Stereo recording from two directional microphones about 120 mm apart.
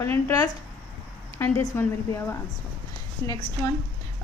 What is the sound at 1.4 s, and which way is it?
Speech, 20° left (ahead or behind).